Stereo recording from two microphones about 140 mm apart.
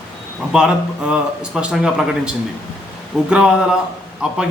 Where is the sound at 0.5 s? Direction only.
5° right (ahead or behind).